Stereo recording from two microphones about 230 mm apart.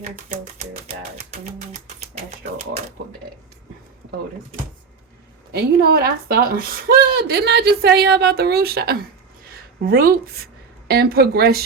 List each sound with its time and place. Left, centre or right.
5.5 s speech: right